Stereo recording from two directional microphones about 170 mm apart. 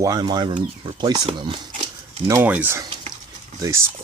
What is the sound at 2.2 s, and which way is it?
Speech, 15° right (ahead or behind).